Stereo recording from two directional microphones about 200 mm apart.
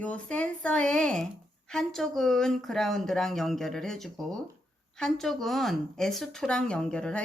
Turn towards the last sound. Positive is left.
turn(degrees=5)  # may be behind; listen again after turning